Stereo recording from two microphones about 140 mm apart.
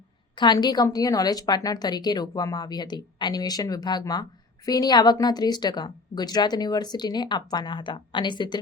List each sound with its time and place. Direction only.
0.3 s a woman's voice: 30° left (ahead or behind)